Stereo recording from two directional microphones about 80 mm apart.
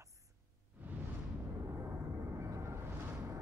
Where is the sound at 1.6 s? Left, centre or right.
Right.